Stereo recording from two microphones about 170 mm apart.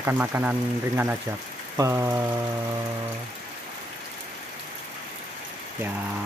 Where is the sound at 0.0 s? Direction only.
15° right (ahead or behind).